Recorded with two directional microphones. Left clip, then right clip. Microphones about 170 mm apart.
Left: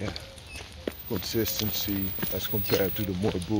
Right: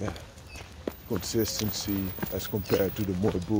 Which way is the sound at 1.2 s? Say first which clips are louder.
Even; 20° right (ahead or behind).